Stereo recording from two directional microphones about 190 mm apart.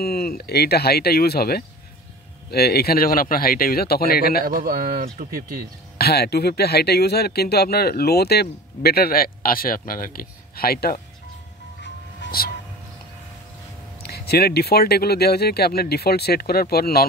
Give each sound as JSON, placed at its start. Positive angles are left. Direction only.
{"t": 0.0, "sound": "speech", "side_deg": 55}
{"t": 4.5, "sound": "speech", "side_deg": -50}
{"t": 5.9, "sound": "speech", "side_deg": 55}
{"t": 11.8, "sound": "music", "side_deg": 60}
{"t": 14.0, "sound": "speech", "side_deg": 55}